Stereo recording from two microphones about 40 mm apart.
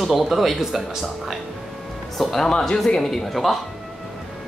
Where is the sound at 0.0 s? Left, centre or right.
Centre.